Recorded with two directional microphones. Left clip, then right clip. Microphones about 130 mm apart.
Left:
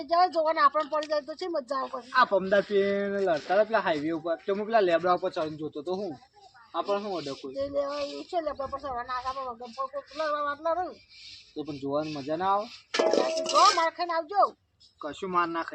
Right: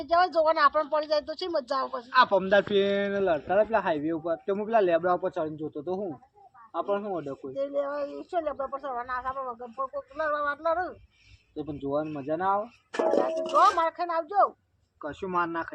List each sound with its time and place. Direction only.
0.0 s speech: 30° left (ahead or behind)
1.9 s a man's voice: centre (ahead or behind); by 7.5 s 15° left (ahead or behind)
7.5 s speech: 30° left (ahead or behind)
11.5 s speech: 10° left (ahead or behind)
12.9 s speech: 50° right (ahead or behind)
13.5 s speech: 20° left (ahead or behind)
15.0 s a man's voice: centre (ahead or behind)